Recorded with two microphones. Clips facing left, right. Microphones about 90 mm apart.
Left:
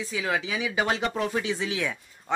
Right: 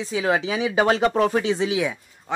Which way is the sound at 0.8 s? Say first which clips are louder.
Right 8 dB; 45° right (ahead or behind).